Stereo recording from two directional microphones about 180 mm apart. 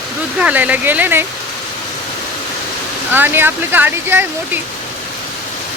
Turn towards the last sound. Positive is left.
turn(degrees=-10)  # may be behind; listen again after turning